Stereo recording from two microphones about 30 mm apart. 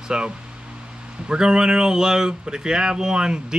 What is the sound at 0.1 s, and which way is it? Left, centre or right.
Speech, right.